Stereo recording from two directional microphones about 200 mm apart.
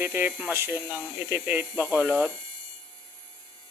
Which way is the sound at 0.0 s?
10° right (ahead or behind).